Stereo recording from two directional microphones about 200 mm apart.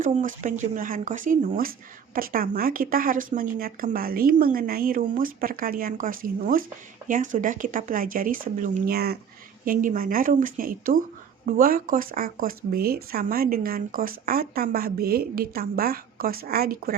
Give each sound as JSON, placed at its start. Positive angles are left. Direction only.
{"t": 0.0, "sound": "speech", "side_deg": -40}